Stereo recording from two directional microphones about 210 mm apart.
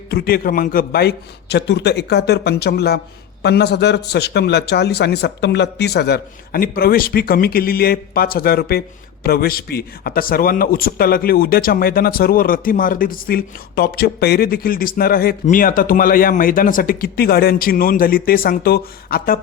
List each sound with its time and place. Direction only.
0.1 s a man's voice: 45° left (ahead or behind)